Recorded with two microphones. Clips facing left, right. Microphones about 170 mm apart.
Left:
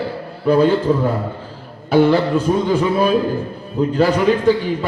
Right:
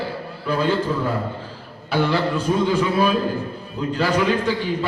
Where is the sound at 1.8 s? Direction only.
50° left (ahead or behind).